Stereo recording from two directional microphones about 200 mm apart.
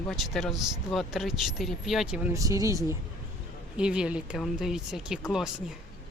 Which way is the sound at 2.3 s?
15° right (ahead or behind).